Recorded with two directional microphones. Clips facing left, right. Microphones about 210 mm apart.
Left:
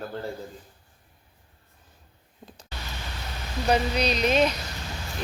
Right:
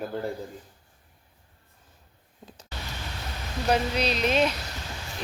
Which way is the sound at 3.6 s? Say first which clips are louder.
Left 1 dB; 5° right (ahead or behind).